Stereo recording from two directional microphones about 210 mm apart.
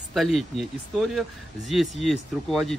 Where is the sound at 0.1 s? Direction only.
Centre (ahead or behind).